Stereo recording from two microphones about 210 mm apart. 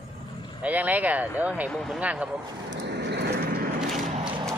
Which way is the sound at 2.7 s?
55° right (ahead or behind).